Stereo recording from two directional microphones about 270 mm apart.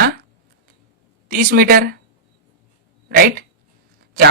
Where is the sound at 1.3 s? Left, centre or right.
Right.